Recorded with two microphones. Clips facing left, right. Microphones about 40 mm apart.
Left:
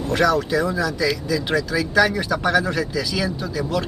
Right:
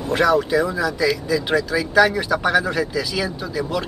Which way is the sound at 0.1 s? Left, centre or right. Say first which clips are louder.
Right 2 dB; centre.